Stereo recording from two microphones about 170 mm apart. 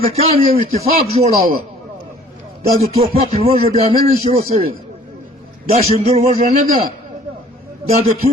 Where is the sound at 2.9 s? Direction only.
35° right (ahead or behind).